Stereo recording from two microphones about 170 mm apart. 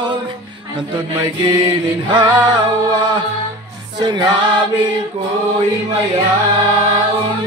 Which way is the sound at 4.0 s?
25° right (ahead or behind).